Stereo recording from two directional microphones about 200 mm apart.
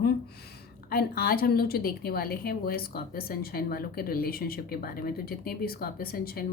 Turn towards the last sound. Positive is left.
turn(degrees=50)  # may be behind; listen again after turning